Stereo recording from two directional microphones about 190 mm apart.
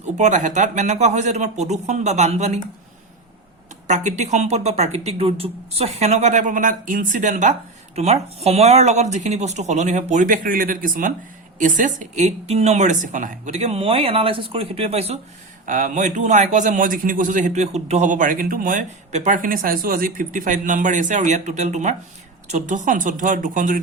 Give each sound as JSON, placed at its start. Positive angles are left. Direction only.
{"t": 0.0, "sound": "speech", "side_deg": -40}
{"t": 3.8, "sound": "speech", "side_deg": -40}
{"t": 15.6, "sound": "a man's voice", "side_deg": -45}